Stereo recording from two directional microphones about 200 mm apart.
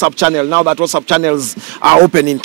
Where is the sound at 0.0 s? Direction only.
10° right (ahead or behind).